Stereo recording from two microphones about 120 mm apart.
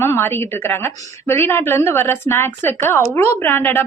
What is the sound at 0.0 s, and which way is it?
Speech, 20° left (ahead or behind).